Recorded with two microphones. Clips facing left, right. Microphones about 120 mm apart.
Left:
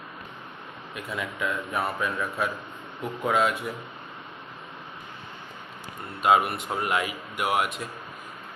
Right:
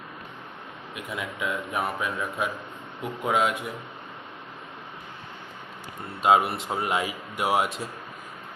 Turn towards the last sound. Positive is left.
turn(degrees=-30)  # may be behind; listen again after turning